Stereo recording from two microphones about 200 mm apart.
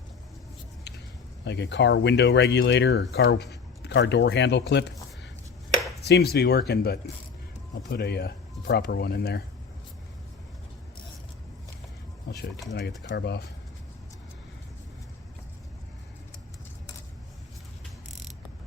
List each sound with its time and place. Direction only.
1.5 s speech: 60° left (ahead or behind)
13.0 s speech: 55° left (ahead or behind)